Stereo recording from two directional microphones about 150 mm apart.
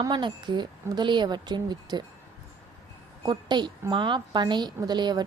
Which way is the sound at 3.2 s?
30° right (ahead or behind).